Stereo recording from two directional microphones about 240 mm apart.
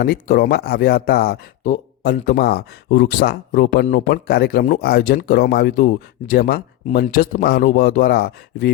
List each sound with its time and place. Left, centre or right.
0.0 s speech: left